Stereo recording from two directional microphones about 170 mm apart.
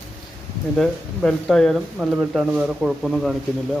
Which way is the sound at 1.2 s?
Centre (ahead or behind).